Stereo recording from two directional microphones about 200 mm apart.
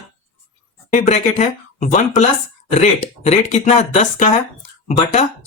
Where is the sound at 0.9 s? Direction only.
35° left (ahead or behind).